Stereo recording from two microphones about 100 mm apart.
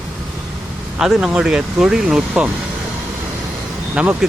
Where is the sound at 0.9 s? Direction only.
5° right (ahead or behind).